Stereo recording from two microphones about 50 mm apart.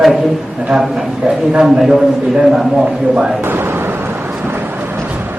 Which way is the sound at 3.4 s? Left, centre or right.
Right.